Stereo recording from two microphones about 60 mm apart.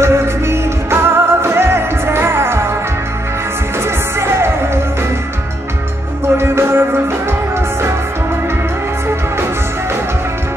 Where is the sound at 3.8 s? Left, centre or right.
Right.